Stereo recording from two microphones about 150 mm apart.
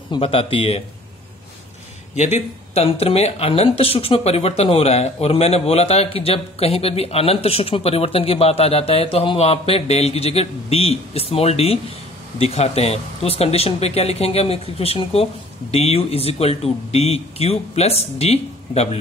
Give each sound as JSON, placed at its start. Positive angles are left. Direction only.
{"t": 0.1, "sound": "speech", "side_deg": 40}
{"t": 2.1, "sound": "speech", "side_deg": 50}